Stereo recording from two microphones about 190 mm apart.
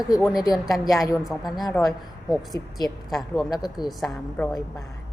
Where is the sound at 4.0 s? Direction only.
Centre (ahead or behind).